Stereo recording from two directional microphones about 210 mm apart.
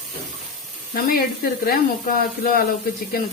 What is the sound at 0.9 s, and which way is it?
Speech, 45° left (ahead or behind).